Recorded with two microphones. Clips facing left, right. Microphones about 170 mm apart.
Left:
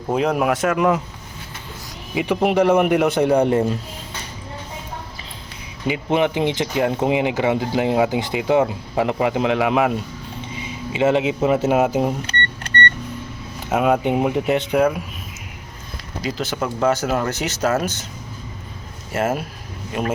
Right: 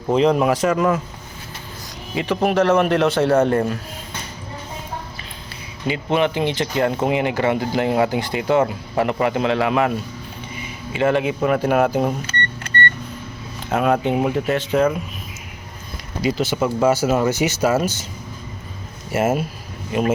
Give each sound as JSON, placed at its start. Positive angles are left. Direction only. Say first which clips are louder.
{"t": 0.1, "sound": "speech", "louder": "right 3 dB", "side_deg": 5}
{"t": 0.8, "sound": "speech", "louder": "left 1 dB", "side_deg": 15}
{"t": 2.1, "sound": "speech", "louder": "left 1 dB", "side_deg": 15}
{"t": 5.9, "sound": "speech", "louder": "even", "side_deg": 15}
{"t": 13.7, "sound": "speech", "louder": "left 1 dB", "side_deg": 10}
{"t": 16.2, "sound": "speech", "louder": "right 5 dB", "side_deg": -5}
{"t": 19.1, "sound": "speech", "louder": "right 2 dB", "side_deg": -5}